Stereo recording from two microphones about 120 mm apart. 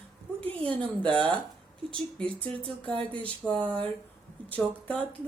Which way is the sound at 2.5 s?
50° right (ahead or behind).